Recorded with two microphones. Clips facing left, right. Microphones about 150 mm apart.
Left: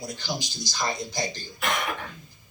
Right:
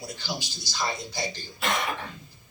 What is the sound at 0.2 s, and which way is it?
A man's voice, 15° left (ahead or behind).